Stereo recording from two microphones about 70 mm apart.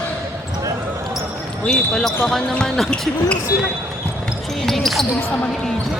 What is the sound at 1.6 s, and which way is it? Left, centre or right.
Speech, centre.